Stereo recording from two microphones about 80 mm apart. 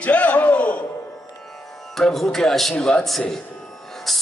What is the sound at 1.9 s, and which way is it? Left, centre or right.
Speech, centre.